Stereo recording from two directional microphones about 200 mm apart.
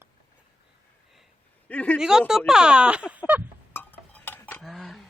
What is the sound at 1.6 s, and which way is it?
Speech, 5° left (ahead or behind).